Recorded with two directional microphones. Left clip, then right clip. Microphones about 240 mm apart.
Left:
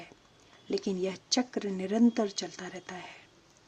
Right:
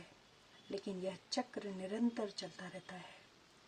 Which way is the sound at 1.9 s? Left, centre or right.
Left.